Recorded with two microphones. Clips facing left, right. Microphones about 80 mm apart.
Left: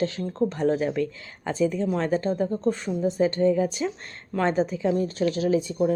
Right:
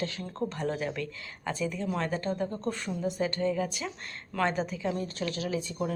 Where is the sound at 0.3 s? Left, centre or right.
Left.